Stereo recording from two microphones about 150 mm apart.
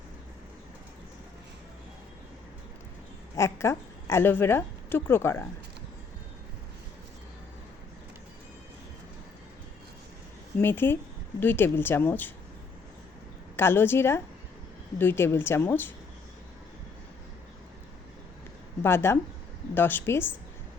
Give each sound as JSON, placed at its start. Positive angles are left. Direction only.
{"t": 3.3, "sound": "a woman's voice", "side_deg": 20}
{"t": 10.6, "sound": "speech", "side_deg": 15}
{"t": 13.6, "sound": "speech", "side_deg": 15}
{"t": 18.8, "sound": "speech", "side_deg": 15}